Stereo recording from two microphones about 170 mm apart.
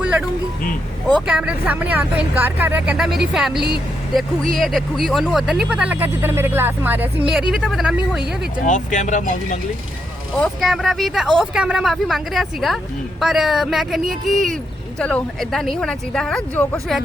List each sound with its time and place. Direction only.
0.0 s music: 5° right (ahead or behind)
1.3 s speech: 5° right (ahead or behind)
8.6 s speech: 45° left (ahead or behind)
10.3 s speech: centre (ahead or behind)